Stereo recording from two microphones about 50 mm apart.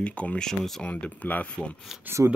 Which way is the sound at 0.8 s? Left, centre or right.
Left.